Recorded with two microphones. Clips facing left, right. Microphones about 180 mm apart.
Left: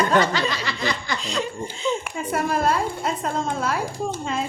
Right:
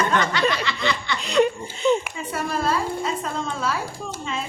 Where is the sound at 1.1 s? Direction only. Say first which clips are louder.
Right 7 dB; 65° right (ahead or behind).